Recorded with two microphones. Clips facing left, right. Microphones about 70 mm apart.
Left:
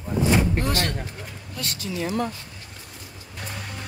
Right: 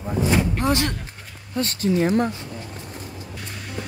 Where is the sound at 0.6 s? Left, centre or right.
Right.